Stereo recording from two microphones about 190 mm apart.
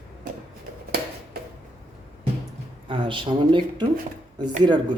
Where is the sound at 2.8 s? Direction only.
25° right (ahead or behind).